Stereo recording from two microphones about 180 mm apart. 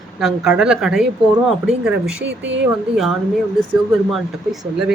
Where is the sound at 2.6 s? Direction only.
Centre (ahead or behind).